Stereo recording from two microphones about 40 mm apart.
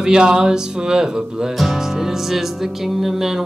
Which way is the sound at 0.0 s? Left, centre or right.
Right.